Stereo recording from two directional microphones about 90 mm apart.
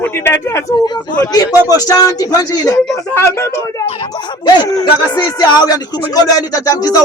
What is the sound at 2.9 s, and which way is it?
Speech, 30° left (ahead or behind).